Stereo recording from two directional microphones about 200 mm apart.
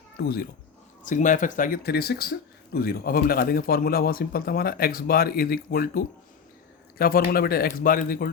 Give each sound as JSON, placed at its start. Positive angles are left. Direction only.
{"t": 0.2, "sound": "a man's voice", "side_deg": 45}